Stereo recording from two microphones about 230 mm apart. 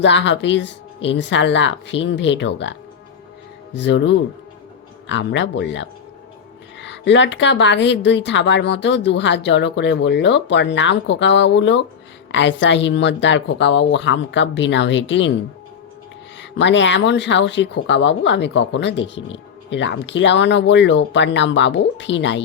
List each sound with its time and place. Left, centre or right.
0.0 s speech: left
3.8 s speech: left
16.4 s speech: left